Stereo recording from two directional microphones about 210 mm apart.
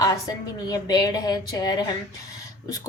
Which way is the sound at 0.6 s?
20° left (ahead or behind).